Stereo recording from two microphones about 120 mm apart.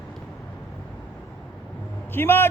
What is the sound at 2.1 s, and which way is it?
Speech, 20° left (ahead or behind).